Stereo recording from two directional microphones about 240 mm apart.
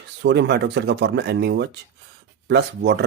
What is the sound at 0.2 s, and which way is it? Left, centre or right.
Speech, right.